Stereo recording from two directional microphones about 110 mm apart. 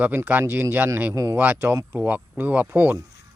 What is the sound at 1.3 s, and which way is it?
Speech, 20° right (ahead or behind).